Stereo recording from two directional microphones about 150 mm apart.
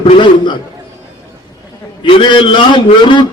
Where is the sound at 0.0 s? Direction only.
35° left (ahead or behind).